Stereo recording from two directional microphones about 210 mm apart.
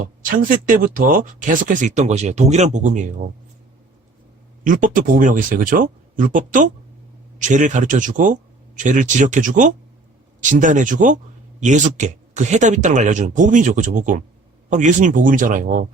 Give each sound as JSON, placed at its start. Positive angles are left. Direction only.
{"t": 0.0, "sound": "speech", "side_deg": -40}
{"t": 4.6, "sound": "speech", "side_deg": -40}